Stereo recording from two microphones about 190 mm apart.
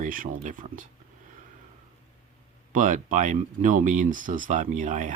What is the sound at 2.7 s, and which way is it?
Speech, 45° right (ahead or behind).